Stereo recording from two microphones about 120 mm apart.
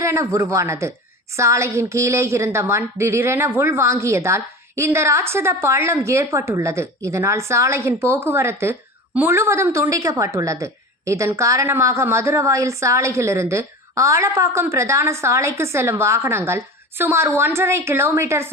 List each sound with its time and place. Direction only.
0.0 s a woman's voice: 25° right (ahead or behind)